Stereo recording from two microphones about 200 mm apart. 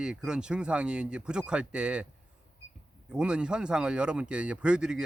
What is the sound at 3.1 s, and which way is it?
Speech, 5° right (ahead or behind).